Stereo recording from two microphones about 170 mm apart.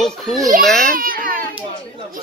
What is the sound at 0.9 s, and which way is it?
Baby cry, 55° right (ahead or behind).